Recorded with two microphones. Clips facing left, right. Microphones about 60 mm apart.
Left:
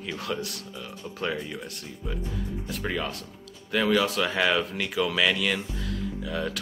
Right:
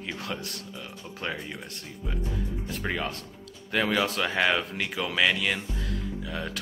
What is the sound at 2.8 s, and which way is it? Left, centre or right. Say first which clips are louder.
Speech: even; right.